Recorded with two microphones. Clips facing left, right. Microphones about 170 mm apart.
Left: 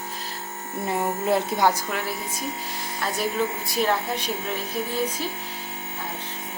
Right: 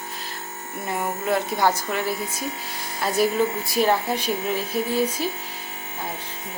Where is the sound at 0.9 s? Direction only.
25° left (ahead or behind).